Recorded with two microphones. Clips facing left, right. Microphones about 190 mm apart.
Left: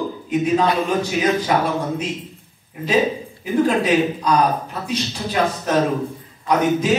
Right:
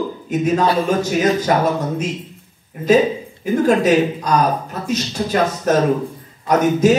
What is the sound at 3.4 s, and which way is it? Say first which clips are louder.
A man's voice: right 3 dB; 45° right (ahead or behind).